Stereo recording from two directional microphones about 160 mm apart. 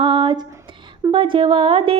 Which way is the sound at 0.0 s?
30° right (ahead or behind).